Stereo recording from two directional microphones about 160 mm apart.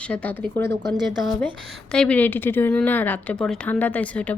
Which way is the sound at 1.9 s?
5° left (ahead or behind).